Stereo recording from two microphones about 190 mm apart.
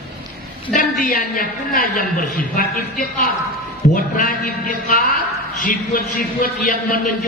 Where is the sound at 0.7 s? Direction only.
45° left (ahead or behind).